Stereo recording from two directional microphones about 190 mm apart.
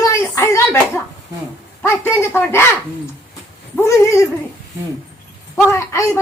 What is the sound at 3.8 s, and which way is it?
Speech, 15° left (ahead or behind).